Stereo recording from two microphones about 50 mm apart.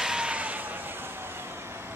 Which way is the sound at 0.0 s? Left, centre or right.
Centre.